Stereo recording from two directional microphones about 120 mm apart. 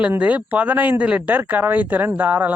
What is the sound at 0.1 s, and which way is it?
Speech, 10° right (ahead or behind).